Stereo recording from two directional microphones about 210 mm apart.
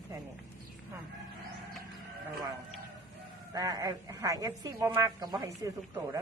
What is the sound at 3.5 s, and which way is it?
A woman's voice, 15° right (ahead or behind).